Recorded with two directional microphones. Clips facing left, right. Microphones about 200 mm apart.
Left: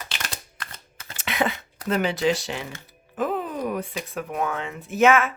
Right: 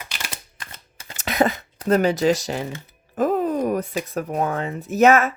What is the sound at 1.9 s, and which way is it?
Speech, 40° right (ahead or behind).